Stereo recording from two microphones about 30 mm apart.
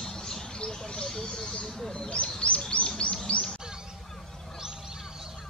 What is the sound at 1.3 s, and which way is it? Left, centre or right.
Speech, left.